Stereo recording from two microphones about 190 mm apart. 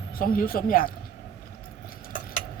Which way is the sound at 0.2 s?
50° left (ahead or behind).